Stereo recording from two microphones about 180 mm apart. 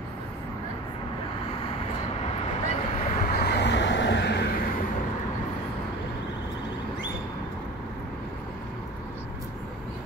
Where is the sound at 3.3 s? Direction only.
65° left (ahead or behind).